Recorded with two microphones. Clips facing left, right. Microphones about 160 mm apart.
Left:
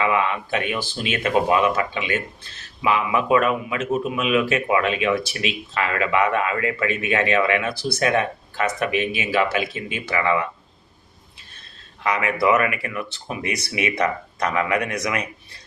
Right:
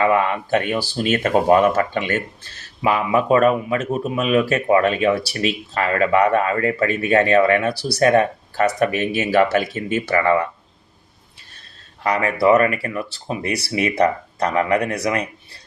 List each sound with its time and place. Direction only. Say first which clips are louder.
0.0 s speech: right 4 dB; 45° right (ahead or behind)
12.0 s speech: right 4 dB; 40° right (ahead or behind)